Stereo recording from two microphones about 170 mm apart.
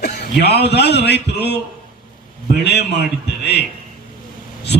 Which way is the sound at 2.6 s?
80° left.